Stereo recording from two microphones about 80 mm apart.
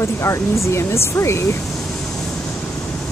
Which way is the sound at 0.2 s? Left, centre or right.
Left.